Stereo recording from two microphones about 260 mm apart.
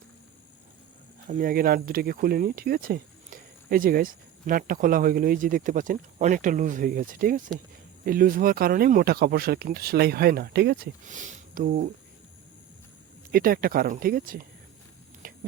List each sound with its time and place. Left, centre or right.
1.3 s speech: right
13.3 s speech: right
15.2 s a sound: right